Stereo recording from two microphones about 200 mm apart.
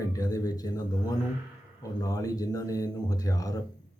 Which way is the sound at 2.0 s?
20° left (ahead or behind).